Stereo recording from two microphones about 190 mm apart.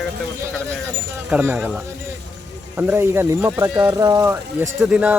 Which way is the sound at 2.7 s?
10° right (ahead or behind).